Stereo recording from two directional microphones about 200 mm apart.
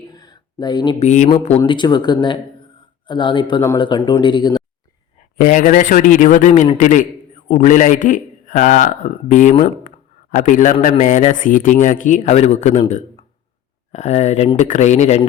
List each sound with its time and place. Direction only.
0.1 s a sound: 20° left (ahead or behind)
1.0 s speech: 35° left (ahead or behind)
5.4 s a man's voice: 40° left (ahead or behind)
13.9 s a man's voice: 35° left (ahead or behind)